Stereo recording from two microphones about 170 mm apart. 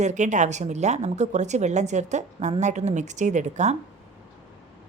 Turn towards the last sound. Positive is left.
turn(degrees=-45)  # may be behind; listen again after turning